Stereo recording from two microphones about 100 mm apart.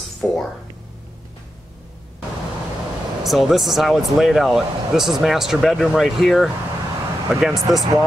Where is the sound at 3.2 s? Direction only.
Centre (ahead or behind).